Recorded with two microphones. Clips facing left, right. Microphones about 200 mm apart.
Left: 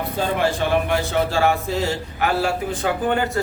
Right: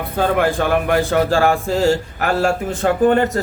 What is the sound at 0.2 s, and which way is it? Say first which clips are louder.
A man's voice: right 5 dB; 55° right (ahead or behind).